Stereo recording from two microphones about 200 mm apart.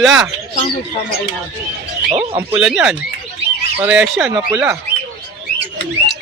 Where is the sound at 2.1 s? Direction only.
30° right (ahead or behind).